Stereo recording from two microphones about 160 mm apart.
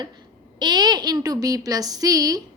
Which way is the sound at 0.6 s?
25° right (ahead or behind).